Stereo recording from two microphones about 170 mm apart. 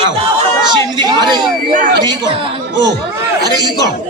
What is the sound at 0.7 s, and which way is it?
A man's voice, 25° right (ahead or behind).